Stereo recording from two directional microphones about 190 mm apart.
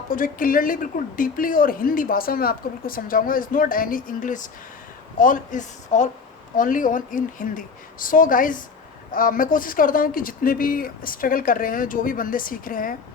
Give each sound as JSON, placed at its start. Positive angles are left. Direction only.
{"t": 0.1, "sound": "a woman's voice", "side_deg": 45}